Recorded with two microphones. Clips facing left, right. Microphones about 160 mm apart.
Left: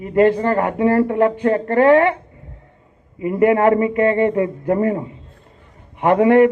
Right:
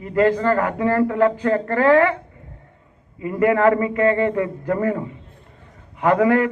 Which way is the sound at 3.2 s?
25° left (ahead or behind).